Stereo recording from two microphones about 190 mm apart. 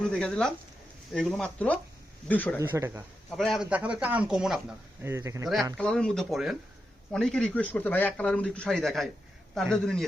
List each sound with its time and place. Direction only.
0.1 s speech: 5° left (ahead or behind)
2.6 s speech: 15° right (ahead or behind)
3.2 s speech: centre (ahead or behind)
5.0 s speech: 15° right (ahead or behind)
5.7 s speech: 5° left (ahead or behind)